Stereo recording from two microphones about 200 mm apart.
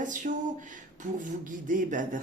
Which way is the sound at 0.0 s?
40° right (ahead or behind).